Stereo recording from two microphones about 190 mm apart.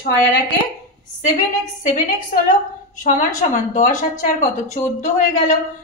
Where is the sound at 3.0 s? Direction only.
45° left (ahead or behind).